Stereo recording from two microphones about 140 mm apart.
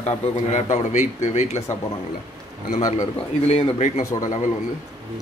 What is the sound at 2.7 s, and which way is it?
A man's voice, 60° left (ahead or behind).